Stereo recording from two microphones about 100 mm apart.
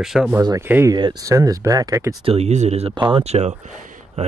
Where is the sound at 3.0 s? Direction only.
60° right (ahead or behind); by 4.3 s 90° right.